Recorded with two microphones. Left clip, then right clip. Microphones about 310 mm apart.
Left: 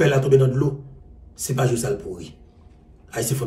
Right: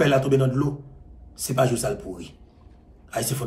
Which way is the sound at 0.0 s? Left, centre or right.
Centre.